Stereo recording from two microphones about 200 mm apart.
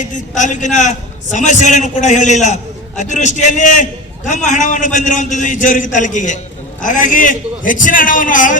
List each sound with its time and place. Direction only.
0.0 s a man's voice: 40° left (ahead or behind)